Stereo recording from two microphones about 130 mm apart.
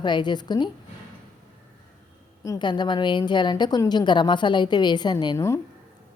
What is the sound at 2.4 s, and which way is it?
A woman's voice, 30° left (ahead or behind).